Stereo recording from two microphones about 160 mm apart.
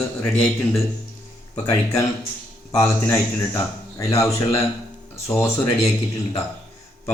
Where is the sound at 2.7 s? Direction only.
20° left (ahead or behind).